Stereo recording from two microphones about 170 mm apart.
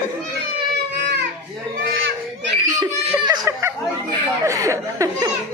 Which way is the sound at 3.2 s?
20° right (ahead or behind).